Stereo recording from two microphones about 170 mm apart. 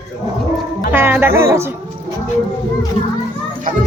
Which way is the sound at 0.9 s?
15° right (ahead or behind).